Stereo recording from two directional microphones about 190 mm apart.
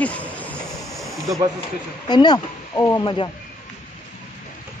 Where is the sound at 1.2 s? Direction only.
15° right (ahead or behind).